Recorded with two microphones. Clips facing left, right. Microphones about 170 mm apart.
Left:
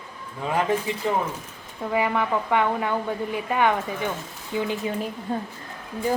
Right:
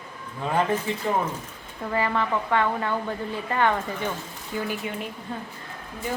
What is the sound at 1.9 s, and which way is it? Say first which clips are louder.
A woman's voice: left 2 dB; 15° left (ahead or behind).